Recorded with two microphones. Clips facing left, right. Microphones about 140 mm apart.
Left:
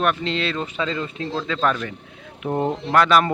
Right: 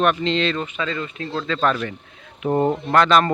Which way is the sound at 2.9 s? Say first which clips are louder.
Left 1 dB; 5° left (ahead or behind).